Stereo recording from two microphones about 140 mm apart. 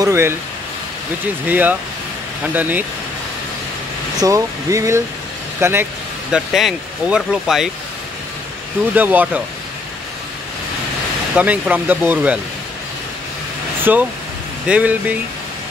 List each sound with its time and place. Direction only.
0.0 s speech: 20° right (ahead or behind)
1.5 s speech: 10° right (ahead or behind)
4.2 s speech: 25° right (ahead or behind)
6.3 s speech: 5° right (ahead or behind)
8.9 s speech: 10° right (ahead or behind)
11.3 s speech: 10° right (ahead or behind)
13.9 s speech: 10° right (ahead or behind)